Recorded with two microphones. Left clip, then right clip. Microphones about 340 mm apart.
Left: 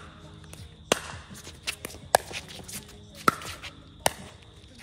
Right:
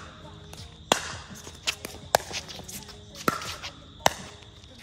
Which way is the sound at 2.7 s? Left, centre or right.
Centre.